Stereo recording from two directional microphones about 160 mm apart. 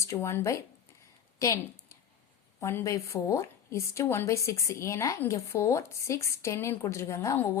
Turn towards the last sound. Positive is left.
turn(degrees=20)  # may be behind; listen again after turning